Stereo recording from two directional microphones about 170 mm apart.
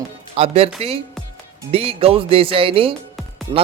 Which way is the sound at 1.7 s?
35° right (ahead or behind).